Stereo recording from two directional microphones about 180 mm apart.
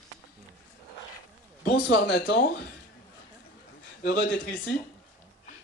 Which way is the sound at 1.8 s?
70° left (ahead or behind).